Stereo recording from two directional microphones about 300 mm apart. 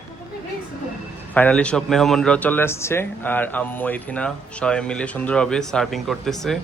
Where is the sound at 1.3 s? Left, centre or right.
Centre.